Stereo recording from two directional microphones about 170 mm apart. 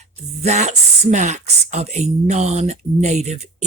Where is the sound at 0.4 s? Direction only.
40° right (ahead or behind).